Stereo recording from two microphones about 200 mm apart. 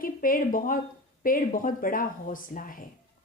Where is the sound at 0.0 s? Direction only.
45° left (ahead or behind).